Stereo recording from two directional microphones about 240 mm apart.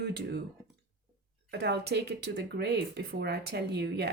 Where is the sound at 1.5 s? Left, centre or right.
Right.